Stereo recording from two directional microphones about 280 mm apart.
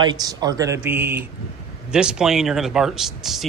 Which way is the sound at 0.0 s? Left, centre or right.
Centre.